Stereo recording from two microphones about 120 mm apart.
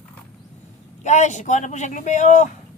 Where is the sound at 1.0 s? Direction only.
85° left.